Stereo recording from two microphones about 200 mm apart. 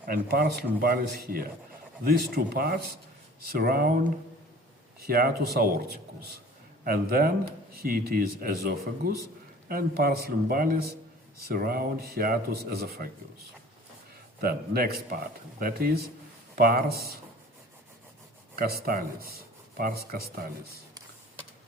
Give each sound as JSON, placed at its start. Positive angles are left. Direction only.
{"t": 0.1, "sound": "speech", "side_deg": -50}
{"t": 5.0, "sound": "speech", "side_deg": -50}
{"t": 14.4, "sound": "speech", "side_deg": -50}
{"t": 18.5, "sound": "speech", "side_deg": -50}